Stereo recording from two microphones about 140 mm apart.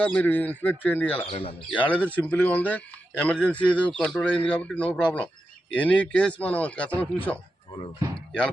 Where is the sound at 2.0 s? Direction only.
10° left (ahead or behind).